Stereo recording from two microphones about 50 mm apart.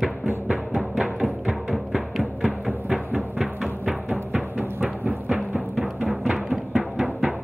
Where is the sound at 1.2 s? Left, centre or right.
Centre.